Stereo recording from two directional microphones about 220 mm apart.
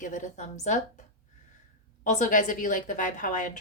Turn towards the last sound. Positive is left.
turn(degrees=35)  # may be behind; listen again after turning